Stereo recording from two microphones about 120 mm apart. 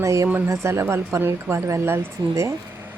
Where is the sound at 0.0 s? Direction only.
25° right (ahead or behind).